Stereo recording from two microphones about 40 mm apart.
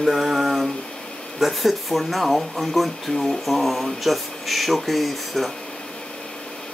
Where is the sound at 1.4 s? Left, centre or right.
Centre.